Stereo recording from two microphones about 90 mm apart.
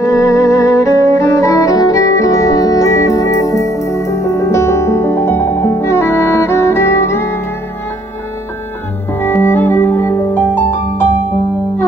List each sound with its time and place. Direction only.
0.0 s music: 40° left (ahead or behind)
9.2 s music: 25° left (ahead or behind)